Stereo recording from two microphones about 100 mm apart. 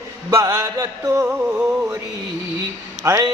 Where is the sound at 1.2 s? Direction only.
15° right (ahead or behind).